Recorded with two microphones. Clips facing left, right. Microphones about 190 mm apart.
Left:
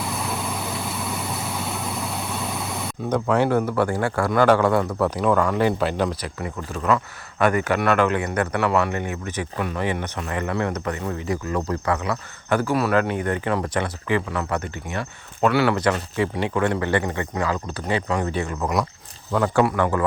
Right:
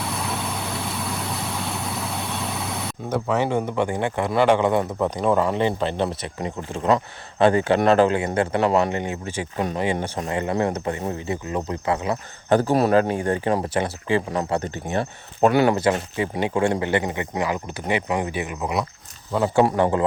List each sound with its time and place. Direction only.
0.0 s vehicle: centre (ahead or behind)
3.5 s speech: 15° right (ahead or behind)
5.2 s speech: 30° right (ahead or behind)
15.6 s speech: 25° right (ahead or behind)
19.7 s speech: 20° right (ahead or behind)